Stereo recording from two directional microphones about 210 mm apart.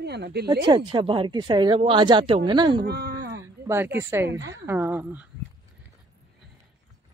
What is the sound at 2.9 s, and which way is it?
Speech, 55° right (ahead or behind).